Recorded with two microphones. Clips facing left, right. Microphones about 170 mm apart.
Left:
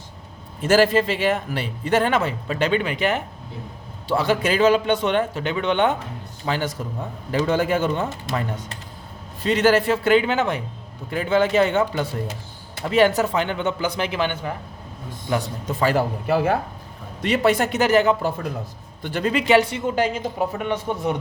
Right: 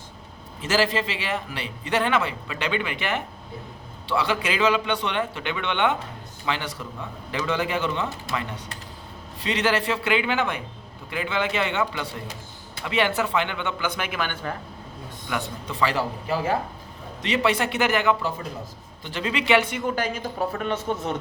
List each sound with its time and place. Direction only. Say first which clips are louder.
0.6 s a man's voice: left 7 dB; 50° left (ahead or behind); by 14.3 s 30° left (ahead or behind)
15.3 s a man's voice: left 6 dB; 40° left (ahead or behind)
19.0 s speech: left 4 dB; 50° left (ahead or behind); by 21.2 s 15° left (ahead or behind)